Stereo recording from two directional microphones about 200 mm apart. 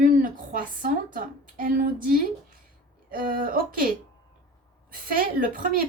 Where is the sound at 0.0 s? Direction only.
40° right (ahead or behind).